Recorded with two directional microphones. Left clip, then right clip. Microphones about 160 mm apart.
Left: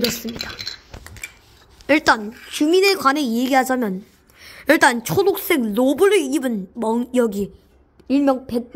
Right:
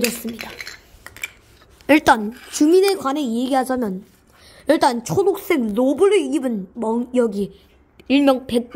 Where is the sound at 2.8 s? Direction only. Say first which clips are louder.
Left 2 dB; centre (ahead or behind).